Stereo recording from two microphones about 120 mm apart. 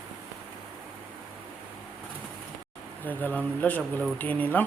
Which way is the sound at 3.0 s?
15° left (ahead or behind).